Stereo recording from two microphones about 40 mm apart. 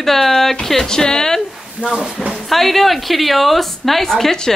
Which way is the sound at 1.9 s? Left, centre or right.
Centre.